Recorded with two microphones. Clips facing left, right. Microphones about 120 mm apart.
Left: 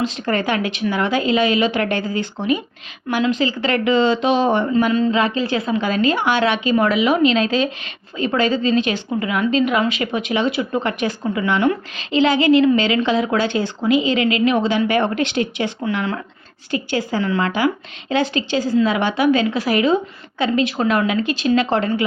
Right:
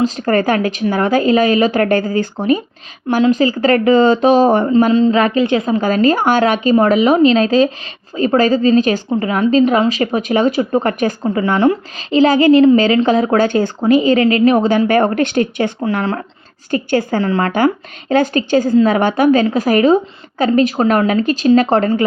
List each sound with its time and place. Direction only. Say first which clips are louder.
0.0 s a woman's voice: right 6 dB; 40° right (ahead or behind)
4.8 s speech: right 5 dB; 30° right (ahead or behind)
5.3 s a woman's voice: right 7 dB; 30° left (ahead or behind)
5.5 s a woman's voice: right 5 dB; 40° right (ahead or behind)